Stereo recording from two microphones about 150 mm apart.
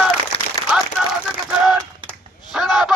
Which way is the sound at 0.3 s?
35° left (ahead or behind).